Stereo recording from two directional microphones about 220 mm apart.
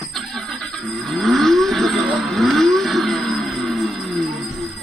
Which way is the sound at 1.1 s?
Centre (ahead or behind).